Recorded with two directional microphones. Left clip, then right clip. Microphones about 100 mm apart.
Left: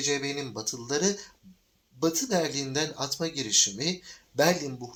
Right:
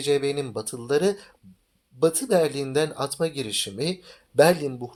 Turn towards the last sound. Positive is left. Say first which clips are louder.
# right 5 dB
turn(degrees=-40)  # may be behind; listen again after turning